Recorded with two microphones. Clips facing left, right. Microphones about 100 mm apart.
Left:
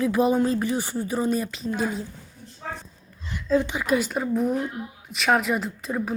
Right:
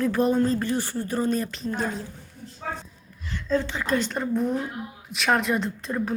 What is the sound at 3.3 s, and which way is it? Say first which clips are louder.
A woman's voice: left 3 dB; 10° left (ahead or behind).